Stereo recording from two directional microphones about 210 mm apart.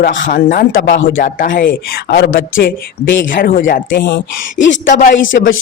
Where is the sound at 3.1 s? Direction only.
60° left (ahead or behind).